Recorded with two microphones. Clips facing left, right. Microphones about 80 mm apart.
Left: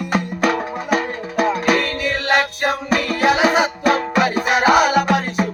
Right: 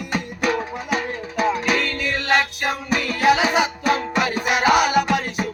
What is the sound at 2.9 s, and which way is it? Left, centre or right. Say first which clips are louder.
Music: even; left.